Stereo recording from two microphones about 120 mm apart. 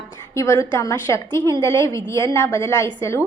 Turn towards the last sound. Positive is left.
turn(degrees=25)  # may be behind; listen again after turning